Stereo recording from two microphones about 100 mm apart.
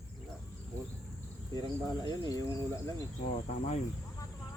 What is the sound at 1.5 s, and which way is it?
Speech, 40° left (ahead or behind).